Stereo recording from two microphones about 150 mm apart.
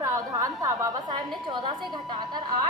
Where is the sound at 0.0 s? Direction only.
20° right (ahead or behind).